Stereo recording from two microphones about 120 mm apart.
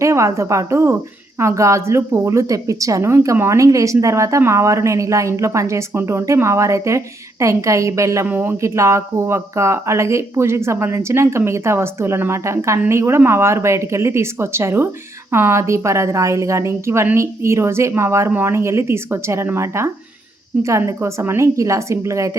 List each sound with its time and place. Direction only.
0.0 s a woman's voice: 25° right (ahead or behind)